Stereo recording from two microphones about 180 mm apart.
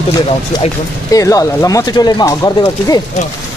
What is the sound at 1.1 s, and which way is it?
Speech, 20° left (ahead or behind).